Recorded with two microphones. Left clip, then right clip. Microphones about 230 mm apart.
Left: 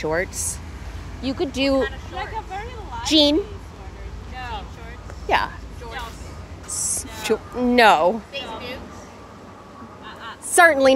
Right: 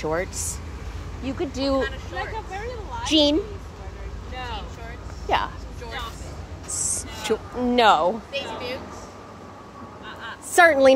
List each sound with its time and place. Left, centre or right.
0.0 s speech: left
1.2 s speech: left
5.3 s speech: left
6.7 s a sound: left
8.3 s speech: centre
10.5 s a woman's voice: left